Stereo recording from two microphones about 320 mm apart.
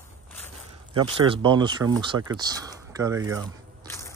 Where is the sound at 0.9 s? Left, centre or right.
Centre.